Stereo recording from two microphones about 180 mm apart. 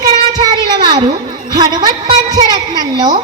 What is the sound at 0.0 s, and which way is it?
Child singing, 25° right (ahead or behind).